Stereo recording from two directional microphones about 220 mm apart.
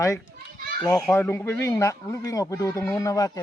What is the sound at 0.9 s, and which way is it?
Speech, 10° left (ahead or behind).